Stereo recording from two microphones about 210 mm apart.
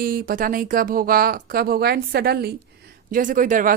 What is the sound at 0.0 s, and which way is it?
Speech, 45° right (ahead or behind).